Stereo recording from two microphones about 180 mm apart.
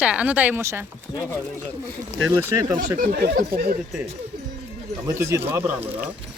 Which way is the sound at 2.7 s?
55° right (ahead or behind).